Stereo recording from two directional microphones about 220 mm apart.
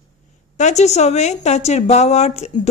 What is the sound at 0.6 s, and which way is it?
A woman's voice, 30° left (ahead or behind).